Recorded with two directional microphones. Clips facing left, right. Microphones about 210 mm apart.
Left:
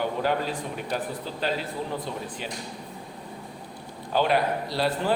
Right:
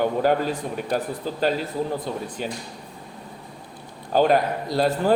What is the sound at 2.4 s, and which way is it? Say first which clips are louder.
Speech: right 6 dB; 45° right (ahead or behind).